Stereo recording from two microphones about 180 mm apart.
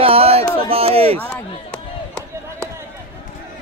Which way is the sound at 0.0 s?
30° right (ahead or behind).